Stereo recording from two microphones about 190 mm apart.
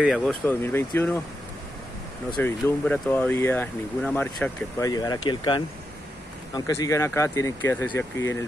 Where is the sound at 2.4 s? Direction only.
10° left (ahead or behind).